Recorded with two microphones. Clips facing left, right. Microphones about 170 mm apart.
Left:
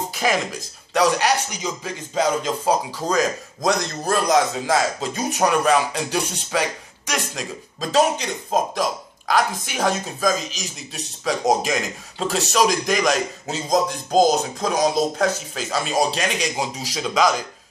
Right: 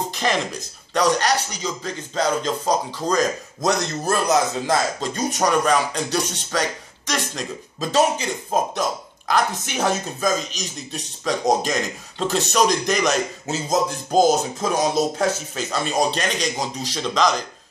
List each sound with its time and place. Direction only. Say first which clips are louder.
0.1 s speech: left 1 dB; 5° left (ahead or behind)
7.8 s speech: even; 5° right (ahead or behind)
9.3 s speech: even; centre (ahead or behind)